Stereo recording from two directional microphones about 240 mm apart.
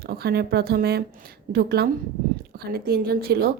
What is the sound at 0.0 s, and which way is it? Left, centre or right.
A woman's voice, right.